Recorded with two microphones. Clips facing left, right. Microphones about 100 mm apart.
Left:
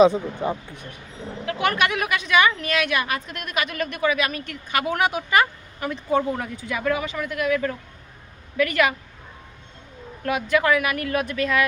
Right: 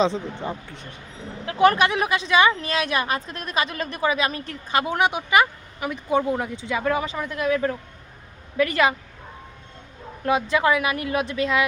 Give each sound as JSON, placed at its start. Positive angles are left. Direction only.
{"t": 0.0, "sound": "speech", "side_deg": 10}
{"t": 1.5, "sound": "a woman's voice", "side_deg": -35}
{"t": 10.2, "sound": "a woman's voice", "side_deg": -25}